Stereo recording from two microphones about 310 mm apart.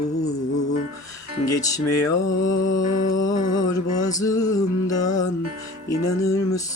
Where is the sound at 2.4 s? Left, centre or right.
Left.